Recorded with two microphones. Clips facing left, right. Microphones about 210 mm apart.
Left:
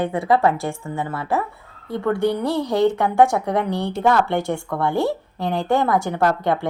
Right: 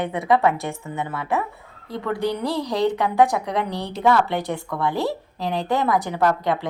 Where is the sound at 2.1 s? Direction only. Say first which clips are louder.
Left 1 dB; 25° left (ahead or behind).